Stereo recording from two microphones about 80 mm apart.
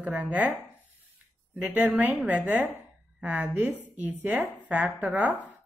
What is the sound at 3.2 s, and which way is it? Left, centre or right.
Speech, centre.